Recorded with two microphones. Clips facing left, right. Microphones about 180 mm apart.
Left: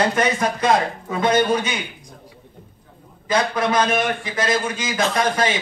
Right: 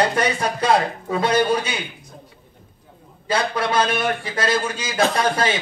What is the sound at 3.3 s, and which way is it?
A man's voice, 30° right (ahead or behind).